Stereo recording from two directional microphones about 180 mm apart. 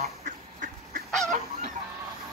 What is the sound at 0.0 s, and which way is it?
Duck, 50° right (ahead or behind).